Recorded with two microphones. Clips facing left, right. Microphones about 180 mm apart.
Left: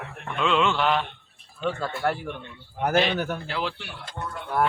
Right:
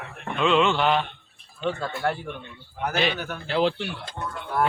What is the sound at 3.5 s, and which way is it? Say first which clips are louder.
Speech: right 7 dB; 25° right (ahead or behind).